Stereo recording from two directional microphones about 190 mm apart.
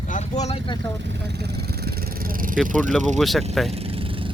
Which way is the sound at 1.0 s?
60° right (ahead or behind).